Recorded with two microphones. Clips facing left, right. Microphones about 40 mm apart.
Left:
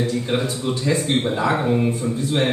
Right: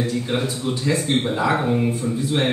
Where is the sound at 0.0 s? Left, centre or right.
Centre.